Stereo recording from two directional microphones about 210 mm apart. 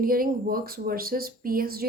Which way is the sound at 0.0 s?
45° right (ahead or behind).